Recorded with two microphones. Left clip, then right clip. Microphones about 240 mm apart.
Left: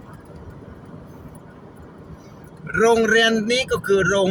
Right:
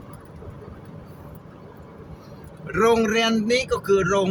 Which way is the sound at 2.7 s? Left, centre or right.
Centre.